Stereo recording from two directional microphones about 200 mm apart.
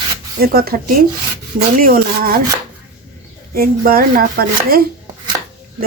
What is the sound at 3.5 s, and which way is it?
Speech, 45° right (ahead or behind).